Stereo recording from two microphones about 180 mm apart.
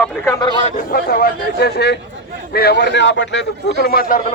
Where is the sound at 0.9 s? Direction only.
55° left (ahead or behind).